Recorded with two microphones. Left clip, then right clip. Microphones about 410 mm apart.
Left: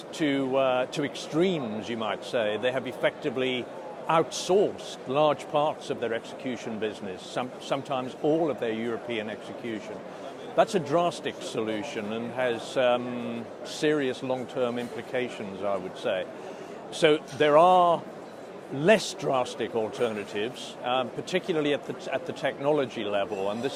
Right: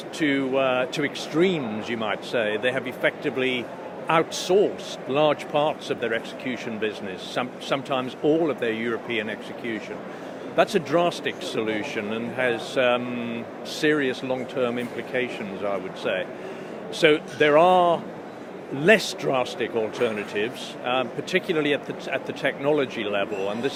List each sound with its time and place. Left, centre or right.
0.2 s speech: left